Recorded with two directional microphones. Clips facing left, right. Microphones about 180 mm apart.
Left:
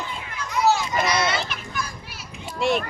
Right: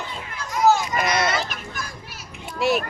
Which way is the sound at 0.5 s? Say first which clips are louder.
Right 2 dB; 50° right (ahead or behind).